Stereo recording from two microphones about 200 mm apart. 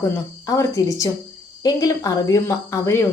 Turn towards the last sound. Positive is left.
turn(degrees=15)  # may be behind; listen again after turning